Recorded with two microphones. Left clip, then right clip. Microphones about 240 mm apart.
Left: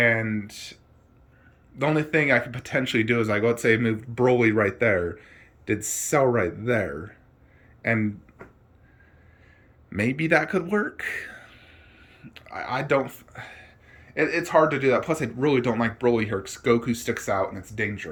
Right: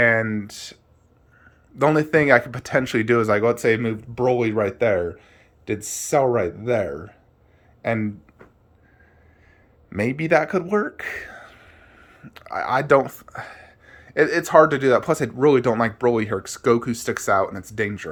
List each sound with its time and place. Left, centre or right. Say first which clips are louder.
0.0 s speech: right 4 dB; centre
1.8 s speech: right 5 dB; right
9.9 s speech: right 3 dB; centre